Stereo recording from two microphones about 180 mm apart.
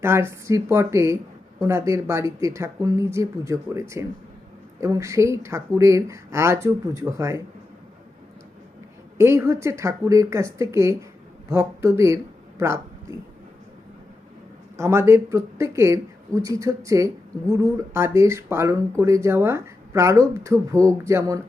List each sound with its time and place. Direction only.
0.0 s speech: 15° right (ahead or behind)
9.1 s speech: 15° right (ahead or behind)
14.8 s speech: 15° right (ahead or behind)